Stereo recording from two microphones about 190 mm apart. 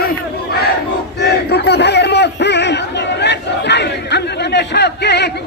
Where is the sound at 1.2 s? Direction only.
60° left (ahead or behind).